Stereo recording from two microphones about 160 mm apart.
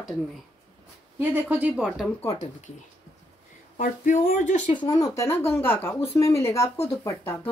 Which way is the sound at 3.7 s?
50° left (ahead or behind).